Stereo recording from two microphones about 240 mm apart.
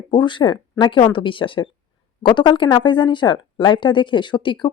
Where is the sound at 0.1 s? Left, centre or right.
Centre.